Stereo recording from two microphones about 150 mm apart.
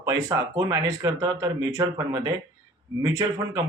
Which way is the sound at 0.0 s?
20° right (ahead or behind).